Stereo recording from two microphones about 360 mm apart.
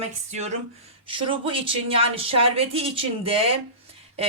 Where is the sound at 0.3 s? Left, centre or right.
Centre.